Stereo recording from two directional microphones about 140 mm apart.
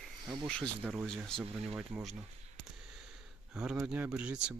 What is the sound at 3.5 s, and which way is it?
Speech, 5° right (ahead or behind).